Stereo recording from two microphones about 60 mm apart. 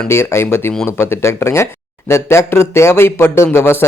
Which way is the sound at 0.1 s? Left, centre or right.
Left.